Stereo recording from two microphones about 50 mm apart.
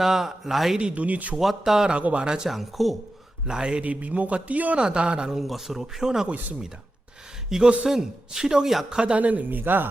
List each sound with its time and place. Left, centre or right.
0.0 s speech: centre
0.8 s speech: right
1.4 s speech: centre
1.9 s speech: right
2.5 s speech: centre
3.4 s speech: centre
3.8 s speech: right; by 5.4 s centre
5.4 s speech: centre
7.5 s speech: centre
8.9 s speech: centre
9.1 s speech: right